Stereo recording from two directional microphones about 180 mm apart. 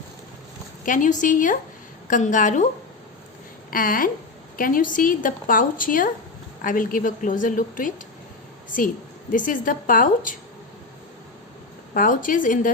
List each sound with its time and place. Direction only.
0.9 s speech: 45° left (ahead or behind)
3.7 s speech: 50° left (ahead or behind)
9.3 s speech: 50° left (ahead or behind)
11.9 s speech: 50° left (ahead or behind)